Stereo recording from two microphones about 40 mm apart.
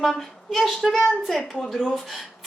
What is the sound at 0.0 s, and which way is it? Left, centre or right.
Speech, centre.